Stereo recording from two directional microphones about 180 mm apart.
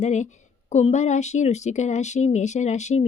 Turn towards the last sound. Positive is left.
turn(degrees=40)  # may be behind; listen again after turning